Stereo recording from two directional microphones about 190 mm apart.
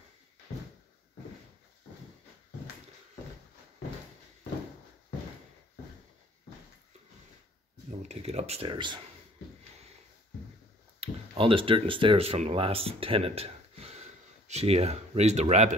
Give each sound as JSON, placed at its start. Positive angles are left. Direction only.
{"t": 8.1, "sound": "speech", "side_deg": -35}
{"t": 11.0, "sound": "speech", "side_deg": -30}